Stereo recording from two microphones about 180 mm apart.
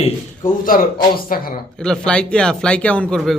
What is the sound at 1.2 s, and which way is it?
Speech, 55° left (ahead or behind).